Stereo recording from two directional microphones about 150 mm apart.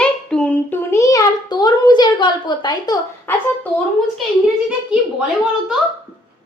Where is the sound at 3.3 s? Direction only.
15° left (ahead or behind).